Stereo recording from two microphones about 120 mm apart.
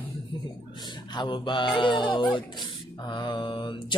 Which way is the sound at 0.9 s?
40° left (ahead or behind).